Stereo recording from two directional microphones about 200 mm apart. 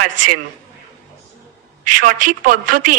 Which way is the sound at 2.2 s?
45° right (ahead or behind).